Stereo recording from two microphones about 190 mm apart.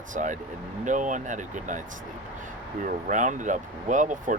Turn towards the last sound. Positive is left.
turn(degrees=-40)  # may be behind; listen again after turning